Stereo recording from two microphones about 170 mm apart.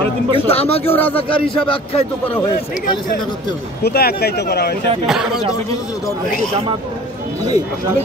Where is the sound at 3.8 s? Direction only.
65° left (ahead or behind).